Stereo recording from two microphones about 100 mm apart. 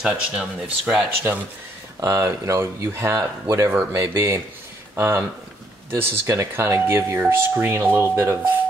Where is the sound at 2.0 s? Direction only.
30° right (ahead or behind).